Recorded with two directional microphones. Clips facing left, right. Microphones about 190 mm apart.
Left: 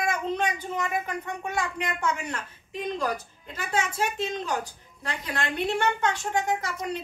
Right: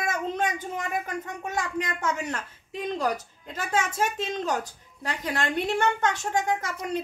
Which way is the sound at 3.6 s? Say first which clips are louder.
Right 1 dB; 45° right (ahead or behind).